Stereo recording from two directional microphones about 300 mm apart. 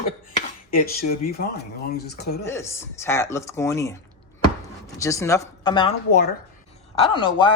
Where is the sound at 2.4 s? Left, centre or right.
Centre.